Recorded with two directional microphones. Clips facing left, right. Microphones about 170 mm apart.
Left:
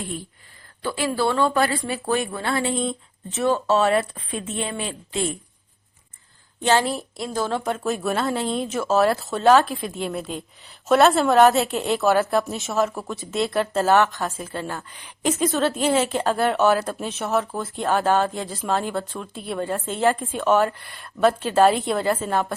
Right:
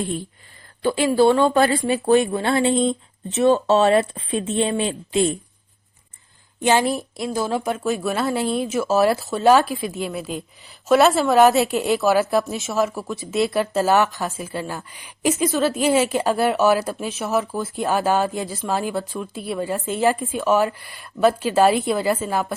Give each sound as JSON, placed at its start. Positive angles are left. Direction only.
{"t": 0.8, "sound": "speech", "side_deg": -20}
{"t": 6.6, "sound": "a woman's voice", "side_deg": -15}